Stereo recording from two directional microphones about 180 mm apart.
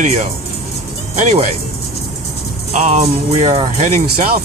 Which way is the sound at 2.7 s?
40° right (ahead or behind).